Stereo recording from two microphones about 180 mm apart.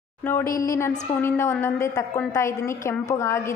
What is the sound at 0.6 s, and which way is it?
A woman's voice, 15° left (ahead or behind).